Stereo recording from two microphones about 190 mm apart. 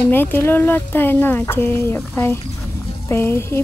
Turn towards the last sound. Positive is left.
turn(degrees=15)  # may be behind; listen again after turning